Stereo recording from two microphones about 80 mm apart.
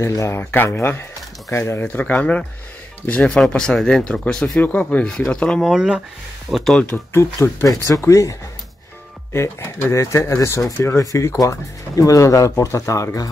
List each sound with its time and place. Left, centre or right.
0.0 s speech: left
1.8 s speech: left
5.6 s speech: centre
6.5 s speech: centre
7.2 s speech: left
7.7 s speech: left
9.3 s speech: left